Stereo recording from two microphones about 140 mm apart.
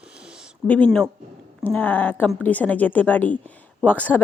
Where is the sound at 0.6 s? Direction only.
10° left (ahead or behind).